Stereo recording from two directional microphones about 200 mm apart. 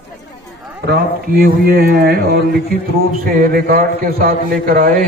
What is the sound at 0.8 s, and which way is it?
A man's voice, 50° right (ahead or behind).